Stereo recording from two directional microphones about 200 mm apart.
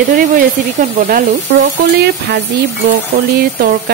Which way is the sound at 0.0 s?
40° right (ahead or behind).